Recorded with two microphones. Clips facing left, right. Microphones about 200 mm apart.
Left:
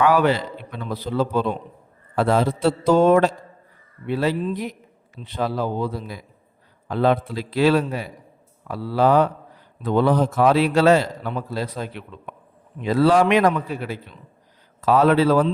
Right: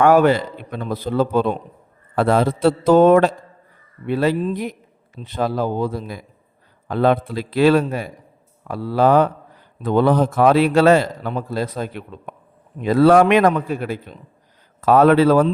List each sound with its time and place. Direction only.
0.0 s a man's voice: 50° right (ahead or behind)